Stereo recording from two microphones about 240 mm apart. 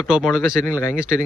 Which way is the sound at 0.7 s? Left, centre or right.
Centre.